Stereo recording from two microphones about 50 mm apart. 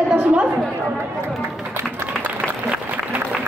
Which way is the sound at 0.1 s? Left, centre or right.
Right.